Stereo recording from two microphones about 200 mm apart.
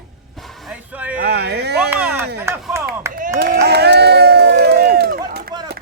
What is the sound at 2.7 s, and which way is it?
Clapping, 15° right (ahead or behind).